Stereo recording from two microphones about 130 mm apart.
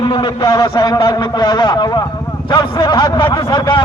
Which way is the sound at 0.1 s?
40° left (ahead or behind).